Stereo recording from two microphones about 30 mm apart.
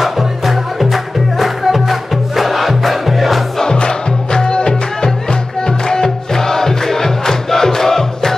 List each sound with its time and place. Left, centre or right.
0.0 s music: centre
3.7 s music: left